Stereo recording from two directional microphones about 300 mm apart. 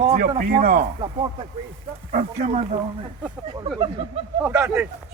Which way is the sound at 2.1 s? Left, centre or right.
Right.